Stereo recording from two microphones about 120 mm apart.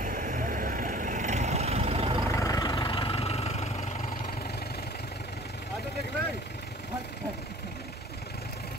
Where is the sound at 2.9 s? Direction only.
50° left (ahead or behind); by 4.1 s 65° left (ahead or behind).